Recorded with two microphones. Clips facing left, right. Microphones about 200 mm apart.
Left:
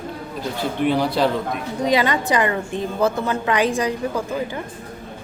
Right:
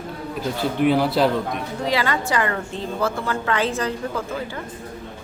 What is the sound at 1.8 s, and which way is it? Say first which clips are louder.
A woman's voice: left 4 dB; 20° left (ahead or behind).